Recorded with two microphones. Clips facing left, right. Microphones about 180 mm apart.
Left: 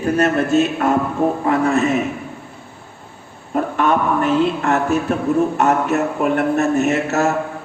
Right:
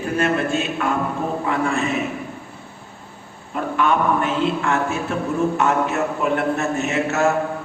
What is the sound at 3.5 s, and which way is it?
A man's voice, 45° left (ahead or behind).